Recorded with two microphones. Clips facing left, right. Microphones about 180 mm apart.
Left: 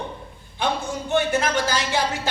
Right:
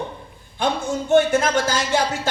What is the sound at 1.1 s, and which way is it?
Speech, 50° right (ahead or behind).